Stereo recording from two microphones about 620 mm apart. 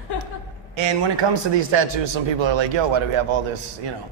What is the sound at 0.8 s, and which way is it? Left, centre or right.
A man's voice, right.